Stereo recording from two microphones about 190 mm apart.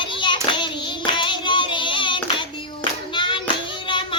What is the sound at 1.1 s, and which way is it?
Child singing, 25° left (ahead or behind).